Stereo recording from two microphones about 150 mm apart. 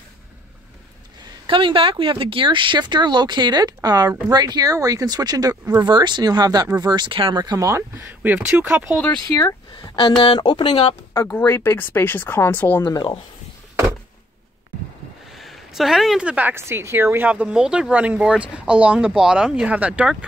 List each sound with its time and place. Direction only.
1.5 s speech: 35° right (ahead or behind); by 8.8 s 15° right (ahead or behind)
9.0 s speech: 15° left (ahead or behind)
9.8 s speech: 35° left (ahead or behind)
11.1 s speech: 15° left (ahead or behind)
12.8 s speech: 30° left (ahead or behind)
15.3 s a woman's voice: centre (ahead or behind)